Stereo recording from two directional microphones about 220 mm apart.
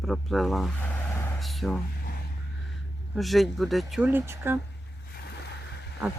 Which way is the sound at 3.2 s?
Centre (ahead or behind).